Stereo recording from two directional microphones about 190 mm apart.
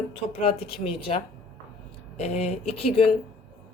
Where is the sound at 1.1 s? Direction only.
35° left (ahead or behind).